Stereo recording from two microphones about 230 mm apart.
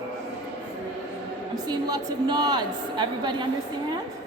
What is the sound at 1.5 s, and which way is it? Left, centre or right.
A woman's voice, centre.